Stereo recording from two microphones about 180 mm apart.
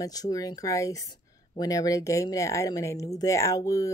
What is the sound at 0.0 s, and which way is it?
Speech, 20° left (ahead or behind).